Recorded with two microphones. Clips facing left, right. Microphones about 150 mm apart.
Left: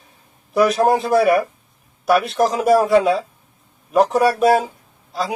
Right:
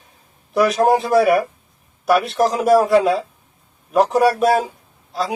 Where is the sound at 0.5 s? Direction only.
Centre (ahead or behind).